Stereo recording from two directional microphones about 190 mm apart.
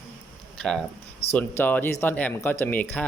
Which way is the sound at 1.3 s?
10° left (ahead or behind).